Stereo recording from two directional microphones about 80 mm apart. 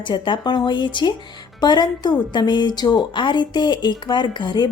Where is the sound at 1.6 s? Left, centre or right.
Left.